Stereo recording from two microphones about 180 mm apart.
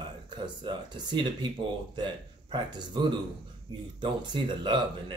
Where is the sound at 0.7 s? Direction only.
25° right (ahead or behind).